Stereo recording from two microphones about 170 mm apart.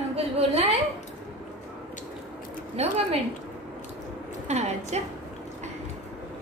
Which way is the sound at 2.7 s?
40° right (ahead or behind).